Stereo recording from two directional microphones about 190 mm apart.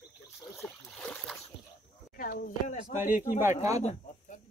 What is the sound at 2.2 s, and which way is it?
Speech, 50° left (ahead or behind).